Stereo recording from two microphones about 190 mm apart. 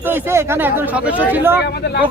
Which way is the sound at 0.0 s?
10° right (ahead or behind).